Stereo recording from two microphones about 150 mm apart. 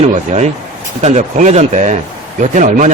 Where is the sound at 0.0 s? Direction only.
50° right (ahead or behind).